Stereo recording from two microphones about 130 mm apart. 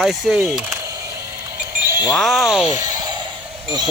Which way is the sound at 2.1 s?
Centre (ahead or behind).